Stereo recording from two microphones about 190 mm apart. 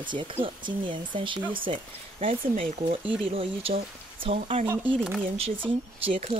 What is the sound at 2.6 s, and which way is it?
Speech, 45° right (ahead or behind).